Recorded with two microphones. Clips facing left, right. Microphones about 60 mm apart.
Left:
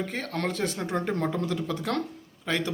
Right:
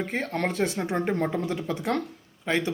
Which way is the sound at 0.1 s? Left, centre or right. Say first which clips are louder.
Right 3 dB; right.